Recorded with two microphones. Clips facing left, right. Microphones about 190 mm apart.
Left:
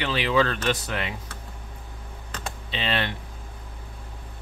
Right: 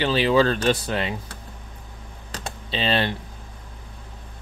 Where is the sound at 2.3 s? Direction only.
35° right (ahead or behind).